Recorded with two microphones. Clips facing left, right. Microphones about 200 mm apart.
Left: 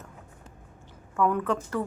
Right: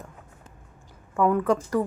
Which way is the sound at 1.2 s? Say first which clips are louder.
Right 4 dB; 10° right (ahead or behind).